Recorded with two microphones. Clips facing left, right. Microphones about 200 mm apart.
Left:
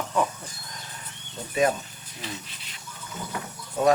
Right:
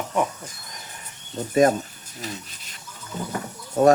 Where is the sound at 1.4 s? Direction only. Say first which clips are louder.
Right 6 dB; 45° right (ahead or behind).